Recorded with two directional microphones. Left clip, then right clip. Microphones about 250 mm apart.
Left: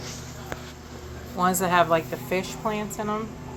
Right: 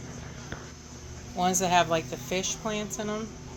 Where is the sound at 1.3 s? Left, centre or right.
Centre.